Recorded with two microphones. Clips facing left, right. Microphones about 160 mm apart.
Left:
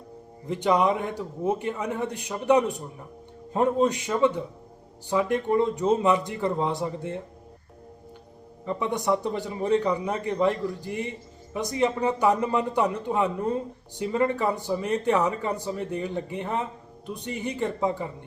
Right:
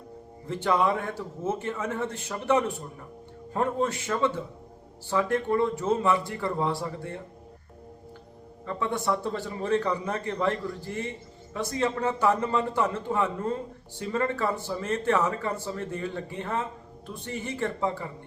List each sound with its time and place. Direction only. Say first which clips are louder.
0.4 s speech: left 2 dB; 15° left (ahead or behind)
8.6 s speech: left 2 dB; 15° left (ahead or behind)